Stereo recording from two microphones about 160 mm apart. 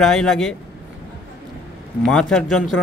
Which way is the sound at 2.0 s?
5° left (ahead or behind).